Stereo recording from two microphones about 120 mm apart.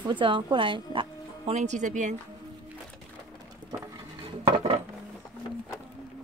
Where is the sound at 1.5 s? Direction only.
85° right.